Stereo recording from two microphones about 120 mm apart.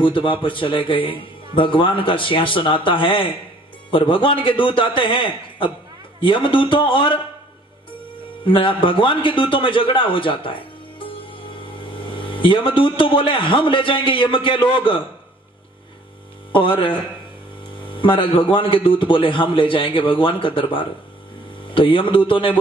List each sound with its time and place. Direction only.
0.0 s a man's voice: 45° left (ahead or behind)
8.5 s a man's voice: 45° left (ahead or behind)
16.5 s a man's voice: 45° left (ahead or behind)